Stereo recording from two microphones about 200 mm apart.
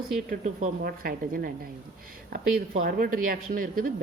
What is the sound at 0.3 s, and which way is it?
Speech, 40° right (ahead or behind).